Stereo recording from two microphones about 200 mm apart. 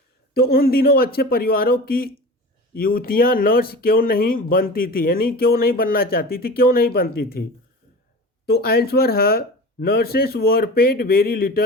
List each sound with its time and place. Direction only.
0.3 s speech: 50° left (ahead or behind)
8.4 s speech: 50° left (ahead or behind)